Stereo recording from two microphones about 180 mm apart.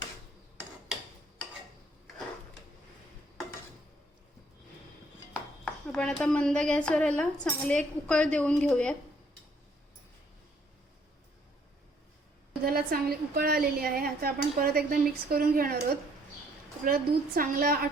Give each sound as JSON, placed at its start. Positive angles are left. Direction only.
{"t": 5.6, "sound": "a woman's voice", "side_deg": 5}
{"t": 12.6, "sound": "a woman's voice", "side_deg": -55}